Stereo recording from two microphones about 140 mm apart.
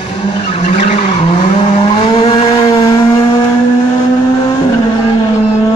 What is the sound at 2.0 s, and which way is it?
Vehicle, 40° left (ahead or behind).